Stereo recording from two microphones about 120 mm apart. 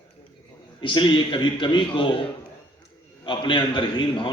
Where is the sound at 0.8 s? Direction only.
40° left (ahead or behind).